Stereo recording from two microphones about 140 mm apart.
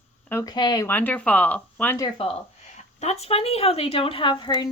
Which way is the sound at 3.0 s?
50° left (ahead or behind).